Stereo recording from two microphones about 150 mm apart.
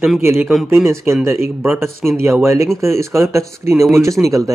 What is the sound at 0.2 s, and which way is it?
Speech, 15° right (ahead or behind).